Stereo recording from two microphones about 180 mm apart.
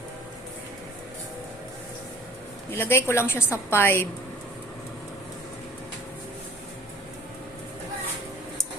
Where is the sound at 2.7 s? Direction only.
15° left (ahead or behind).